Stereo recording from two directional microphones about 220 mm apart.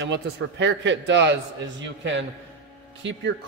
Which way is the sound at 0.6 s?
55° right (ahead or behind).